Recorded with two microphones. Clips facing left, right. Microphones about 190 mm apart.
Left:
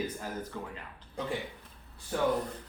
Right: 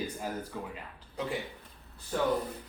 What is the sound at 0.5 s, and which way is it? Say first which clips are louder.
Speech: right 1 dB; 10° right (ahead or behind).